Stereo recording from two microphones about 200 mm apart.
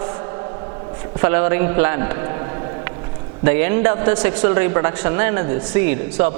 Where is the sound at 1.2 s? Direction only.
20° right (ahead or behind).